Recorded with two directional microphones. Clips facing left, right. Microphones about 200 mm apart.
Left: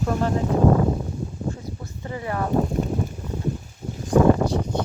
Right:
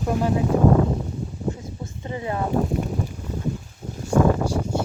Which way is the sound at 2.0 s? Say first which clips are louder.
Right 1 dB; 20° right (ahead or behind).